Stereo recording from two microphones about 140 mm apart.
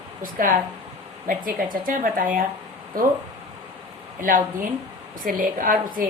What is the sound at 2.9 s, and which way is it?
Speech, 90° right.